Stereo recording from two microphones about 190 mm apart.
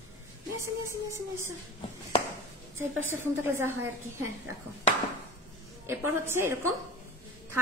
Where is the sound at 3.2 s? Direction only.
10° right (ahead or behind).